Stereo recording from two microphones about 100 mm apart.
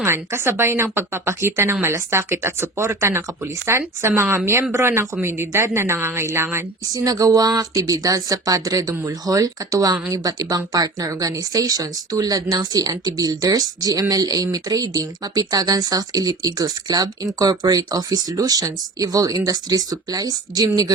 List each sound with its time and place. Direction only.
0.0 s speech: 25° right (ahead or behind)
6.8 s speech: 40° right (ahead or behind)